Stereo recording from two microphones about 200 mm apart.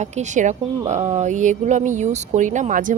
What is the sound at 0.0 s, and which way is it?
A woman's voice, 35° right (ahead or behind).